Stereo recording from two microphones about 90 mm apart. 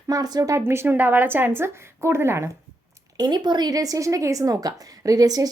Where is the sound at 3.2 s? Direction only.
55° right (ahead or behind).